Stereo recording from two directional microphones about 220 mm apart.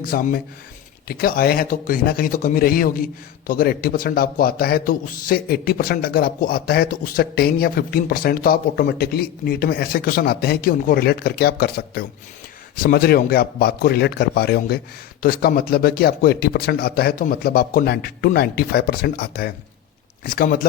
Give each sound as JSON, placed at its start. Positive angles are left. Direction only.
{"t": 0.0, "sound": "a man's voice", "side_deg": 40}